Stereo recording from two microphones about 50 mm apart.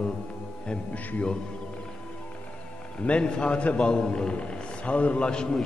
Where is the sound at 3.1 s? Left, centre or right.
Centre.